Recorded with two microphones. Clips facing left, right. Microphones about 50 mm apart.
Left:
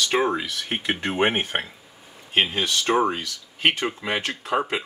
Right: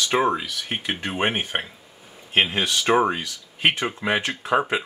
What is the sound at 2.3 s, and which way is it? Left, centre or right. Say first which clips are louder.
Speech: right 1 dB; right.